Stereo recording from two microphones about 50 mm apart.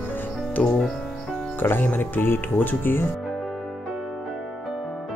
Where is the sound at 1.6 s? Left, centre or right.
Left.